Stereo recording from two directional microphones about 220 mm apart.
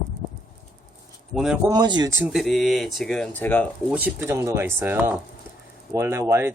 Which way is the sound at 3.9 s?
10° right (ahead or behind).